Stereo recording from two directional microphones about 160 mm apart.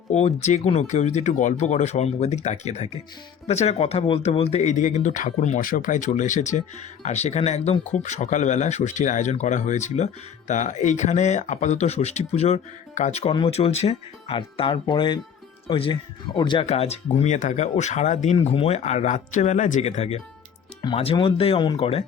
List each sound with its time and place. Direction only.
0.1 s speech: 45° left (ahead or behind)
16.6 s speech: 40° left (ahead or behind)